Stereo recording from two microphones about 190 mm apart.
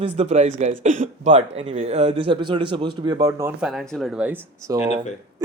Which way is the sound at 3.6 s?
Centre (ahead or behind).